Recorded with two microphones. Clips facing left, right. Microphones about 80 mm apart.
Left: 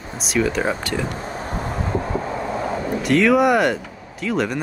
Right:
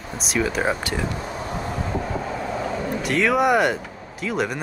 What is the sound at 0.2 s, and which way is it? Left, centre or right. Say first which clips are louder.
Speech: left 2 dB; centre.